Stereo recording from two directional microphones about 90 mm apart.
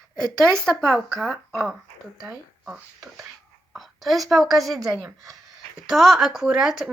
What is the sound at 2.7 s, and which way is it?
A woman's voice, 5° right (ahead or behind).